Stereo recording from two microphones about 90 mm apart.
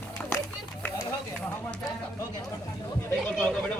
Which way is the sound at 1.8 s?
35° left (ahead or behind).